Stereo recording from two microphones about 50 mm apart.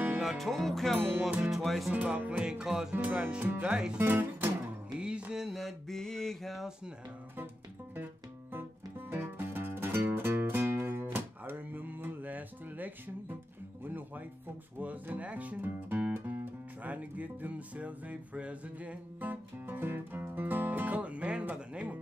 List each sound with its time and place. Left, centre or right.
0.2 s music: centre
1.4 s mantra: centre
1.7 s mantra: centre
2.0 s music: right
2.6 s mantra: centre
2.9 s music: right
3.6 s music: centre
4.1 s music: right
4.9 s music: centre
5.3 s mantra: centre
5.6 s mantra: centre
8.5 s music: right
14.8 s speech: right
16.8 s music: right